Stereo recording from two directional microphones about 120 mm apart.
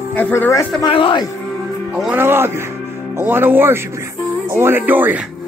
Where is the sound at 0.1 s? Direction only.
15° left (ahead or behind).